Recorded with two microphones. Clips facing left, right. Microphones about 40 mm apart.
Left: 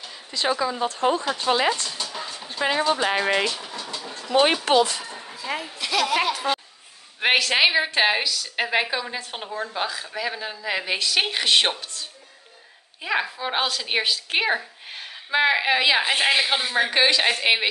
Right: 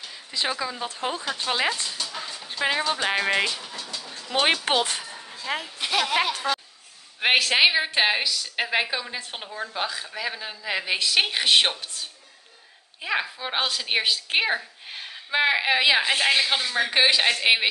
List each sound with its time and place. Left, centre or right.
0.3 s speech: centre
3.7 s bird: centre
4.3 s speech: centre
5.8 s a sound: centre
7.2 s speech: centre
13.0 s speech: centre
16.0 s speech: centre
16.9 s speech: centre